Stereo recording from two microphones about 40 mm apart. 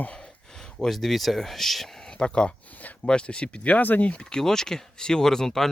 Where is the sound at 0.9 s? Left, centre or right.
Centre.